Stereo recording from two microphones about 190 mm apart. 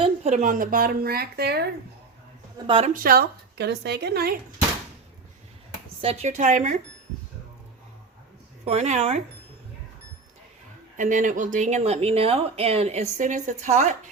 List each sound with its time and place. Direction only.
0.0 s speech: 35° right (ahead or behind); by 1.6 s 55° right (ahead or behind)
2.6 s a woman's voice: 30° right (ahead or behind)
2.9 s a woman's voice: 50° right (ahead or behind)
6.0 s speech: 35° right (ahead or behind)
8.6 s speech: 35° right (ahead or behind)
10.9 s speech: 40° right (ahead or behind)